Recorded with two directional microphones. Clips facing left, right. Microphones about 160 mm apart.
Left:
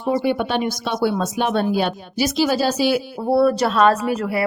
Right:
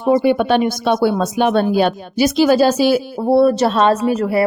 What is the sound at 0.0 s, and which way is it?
Speech, 55° right (ahead or behind).